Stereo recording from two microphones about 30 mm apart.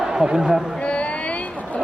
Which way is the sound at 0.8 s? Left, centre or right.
Left.